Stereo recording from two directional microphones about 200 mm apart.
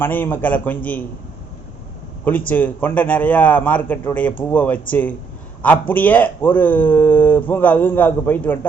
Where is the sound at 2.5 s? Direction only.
10° left (ahead or behind).